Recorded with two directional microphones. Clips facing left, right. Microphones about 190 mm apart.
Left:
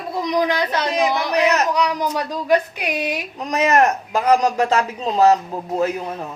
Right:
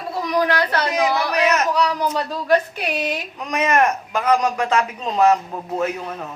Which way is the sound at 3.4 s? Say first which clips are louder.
Left 2 dB; 35° left (ahead or behind).